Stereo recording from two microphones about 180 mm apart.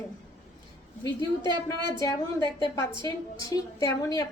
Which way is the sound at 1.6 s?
15° left (ahead or behind).